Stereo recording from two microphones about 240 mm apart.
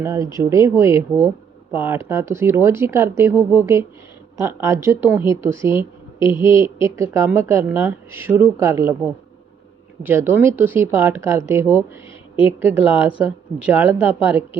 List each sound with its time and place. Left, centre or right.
0.0 s a woman's voice: centre
6.3 s a woman's voice: left
6.6 s a woman's voice: centre
10.0 s a woman's voice: centre